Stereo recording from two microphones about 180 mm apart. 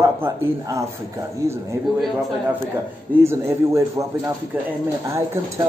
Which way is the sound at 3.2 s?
15° right (ahead or behind).